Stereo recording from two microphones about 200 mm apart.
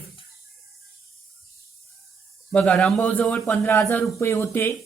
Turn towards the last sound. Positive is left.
turn(degrees=10)  # may be behind; listen again after turning